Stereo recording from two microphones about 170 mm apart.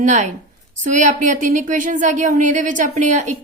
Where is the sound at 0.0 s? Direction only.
45° right (ahead or behind).